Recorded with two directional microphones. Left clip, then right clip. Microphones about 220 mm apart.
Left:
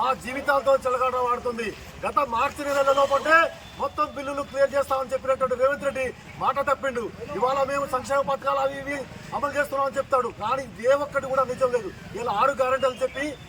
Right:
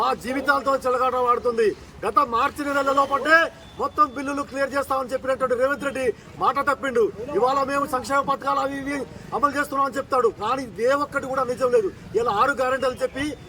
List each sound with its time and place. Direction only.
0.0 s speech: 20° right (ahead or behind)